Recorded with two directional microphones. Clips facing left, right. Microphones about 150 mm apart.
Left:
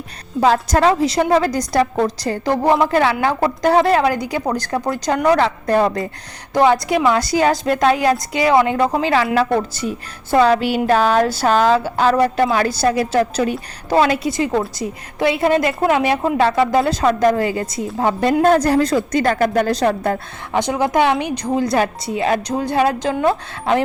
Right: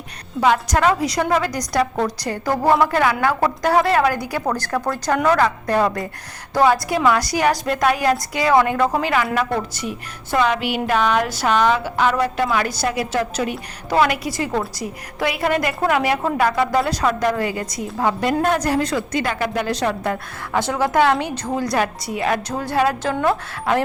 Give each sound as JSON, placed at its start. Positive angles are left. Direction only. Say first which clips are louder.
{"t": 0.3, "sound": "a woman's voice", "louder": "left 3 dB", "side_deg": 30}
{"t": 20.5, "sound": "a woman's voice", "louder": "left 2 dB", "side_deg": 20}